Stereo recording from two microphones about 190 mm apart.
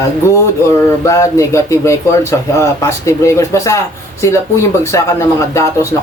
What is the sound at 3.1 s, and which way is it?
Speech, 15° left (ahead or behind).